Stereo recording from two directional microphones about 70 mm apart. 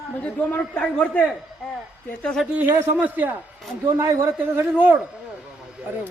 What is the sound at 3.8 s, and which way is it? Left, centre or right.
Speech, right.